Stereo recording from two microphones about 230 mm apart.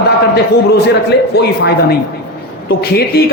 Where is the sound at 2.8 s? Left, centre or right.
Left.